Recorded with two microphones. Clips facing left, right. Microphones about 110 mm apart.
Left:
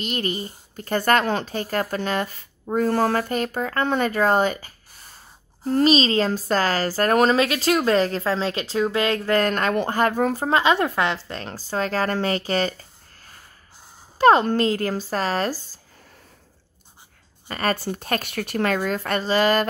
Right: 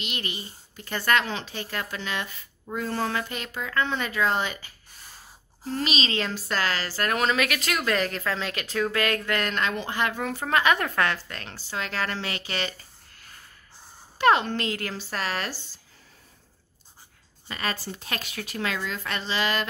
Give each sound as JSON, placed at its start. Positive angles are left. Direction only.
{"t": 0.0, "sound": "speech", "side_deg": 40}
{"t": 14.1, "sound": "speech", "side_deg": 35}
{"t": 17.5, "sound": "speech", "side_deg": 45}